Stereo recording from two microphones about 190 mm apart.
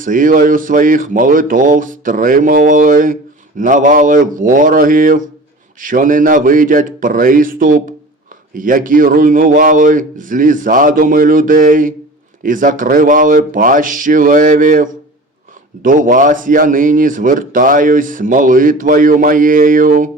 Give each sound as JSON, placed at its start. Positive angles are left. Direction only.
{"t": 0.0, "sound": "speech", "side_deg": -45}